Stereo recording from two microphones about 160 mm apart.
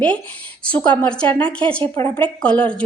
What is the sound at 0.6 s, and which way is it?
A woman's voice, 10° left (ahead or behind).